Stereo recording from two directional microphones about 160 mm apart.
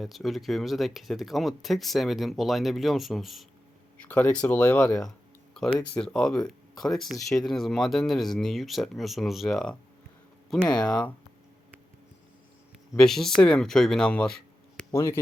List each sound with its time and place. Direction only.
0.0 s speech: centre (ahead or behind)
4.0 s speech: 10° left (ahead or behind)
13.0 s speech: 5° left (ahead or behind)
14.9 s speech: 20° left (ahead or behind)